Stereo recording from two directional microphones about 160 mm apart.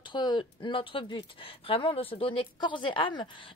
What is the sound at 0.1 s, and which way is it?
Speech, 30° left (ahead or behind).